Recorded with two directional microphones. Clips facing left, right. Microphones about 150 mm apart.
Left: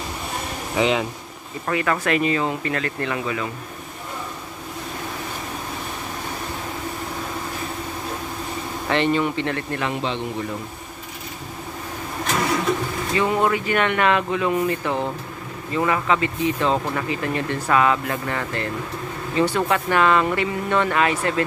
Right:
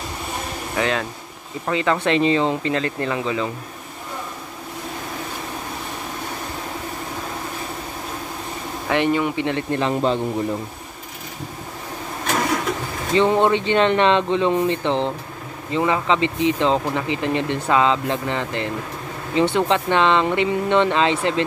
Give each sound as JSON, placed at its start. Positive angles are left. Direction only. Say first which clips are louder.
{"t": 0.7, "sound": "speech", "louder": "left 2 dB", "side_deg": 15}
{"t": 1.7, "sound": "speech", "louder": "right 2 dB", "side_deg": -20}
{"t": 8.9, "sound": "speech", "louder": "right 1 dB", "side_deg": -10}
{"t": 13.1, "sound": "speech", "louder": "right 4 dB", "side_deg": -30}